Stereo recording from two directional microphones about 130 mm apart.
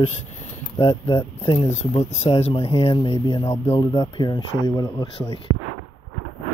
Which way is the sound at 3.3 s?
20° left (ahead or behind).